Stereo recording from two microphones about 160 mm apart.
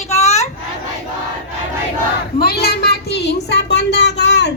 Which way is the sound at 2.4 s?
75° left (ahead or behind).